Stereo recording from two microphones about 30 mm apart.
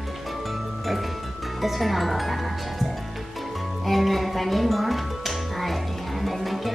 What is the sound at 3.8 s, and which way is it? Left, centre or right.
Music, centre.